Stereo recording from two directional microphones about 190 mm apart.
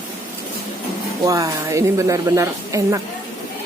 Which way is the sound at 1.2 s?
20° right (ahead or behind).